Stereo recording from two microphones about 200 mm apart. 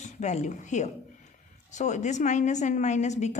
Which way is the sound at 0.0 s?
35° left (ahead or behind).